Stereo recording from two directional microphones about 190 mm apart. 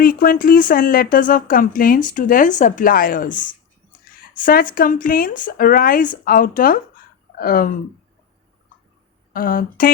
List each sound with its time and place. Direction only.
0.0 s speech: 45° left (ahead or behind)
9.3 s speech: 50° left (ahead or behind)